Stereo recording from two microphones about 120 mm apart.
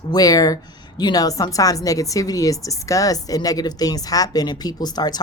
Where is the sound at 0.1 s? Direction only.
30° left (ahead or behind).